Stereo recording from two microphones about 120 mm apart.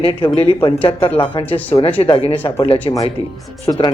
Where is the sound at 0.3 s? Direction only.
45° left (ahead or behind).